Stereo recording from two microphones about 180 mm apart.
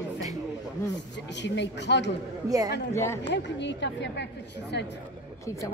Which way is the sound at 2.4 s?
20° right (ahead or behind).